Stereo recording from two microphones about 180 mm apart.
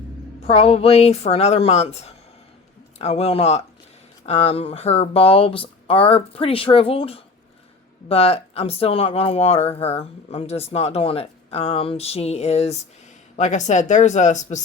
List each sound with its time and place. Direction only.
0.4 s speech: 35° left (ahead or behind)